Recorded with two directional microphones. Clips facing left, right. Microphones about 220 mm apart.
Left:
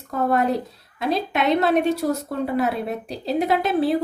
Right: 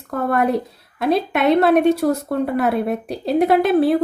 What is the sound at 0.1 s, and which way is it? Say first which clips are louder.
A woman's voice: right 2 dB; 60° right (ahead or behind).